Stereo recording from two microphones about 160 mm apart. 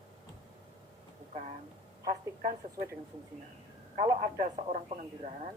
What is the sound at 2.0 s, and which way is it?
Speech, 65° right (ahead or behind).